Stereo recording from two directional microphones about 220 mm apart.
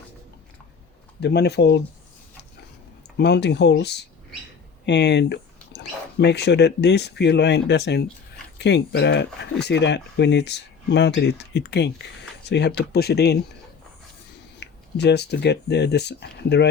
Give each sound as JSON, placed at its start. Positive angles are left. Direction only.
{"t": 1.2, "sound": "speech", "side_deg": 50}
{"t": 3.2, "sound": "speech", "side_deg": 50}
{"t": 14.6, "sound": "speech", "side_deg": 50}